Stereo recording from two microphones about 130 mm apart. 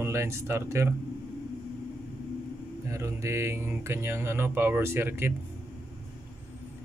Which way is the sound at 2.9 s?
25° right (ahead or behind).